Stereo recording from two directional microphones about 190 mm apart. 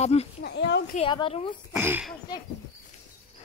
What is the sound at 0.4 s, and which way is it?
Speech, 65° left (ahead or behind).